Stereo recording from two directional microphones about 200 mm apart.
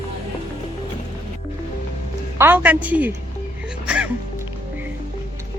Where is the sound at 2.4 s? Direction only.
10° right (ahead or behind).